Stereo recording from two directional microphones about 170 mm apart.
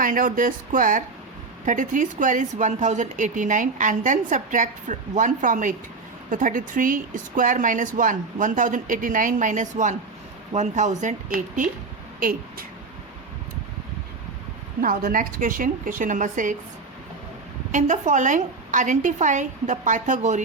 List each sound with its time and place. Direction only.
0.0 s a woman's voice: 55° right (ahead or behind)
12.2 s speech: 60° right (ahead or behind)
14.8 s a woman's voice: 55° right (ahead or behind)
17.7 s a woman's voice: 45° right (ahead or behind)